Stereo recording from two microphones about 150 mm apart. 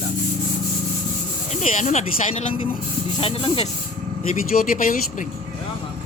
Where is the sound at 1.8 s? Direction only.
50° left (ahead or behind).